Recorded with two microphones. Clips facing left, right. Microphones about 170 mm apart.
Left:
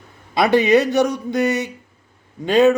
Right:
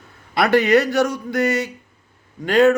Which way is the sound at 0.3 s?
20° left (ahead or behind).